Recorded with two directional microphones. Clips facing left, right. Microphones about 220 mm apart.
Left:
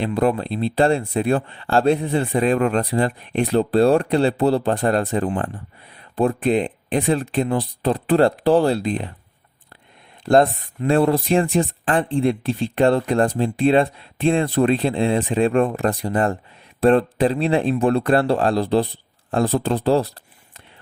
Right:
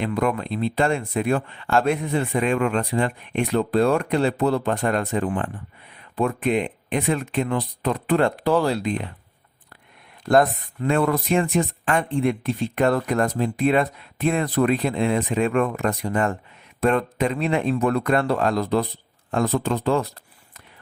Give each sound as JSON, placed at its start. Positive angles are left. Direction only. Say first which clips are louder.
{"t": 0.0, "sound": "speech", "louder": "left 3 dB", "side_deg": 30}
{"t": 10.2, "sound": "speech", "louder": "left 2 dB", "side_deg": 30}